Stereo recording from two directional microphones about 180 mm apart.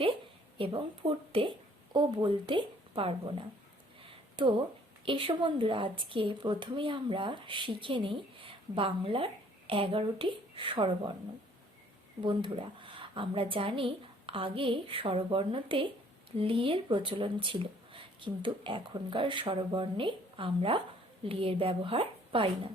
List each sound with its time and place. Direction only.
0.6 s a woman's voice: 30° right (ahead or behind)
4.1 s a sound: 25° right (ahead or behind)
5.0 s speech: 30° right (ahead or behind)
12.2 s speech: 25° right (ahead or behind)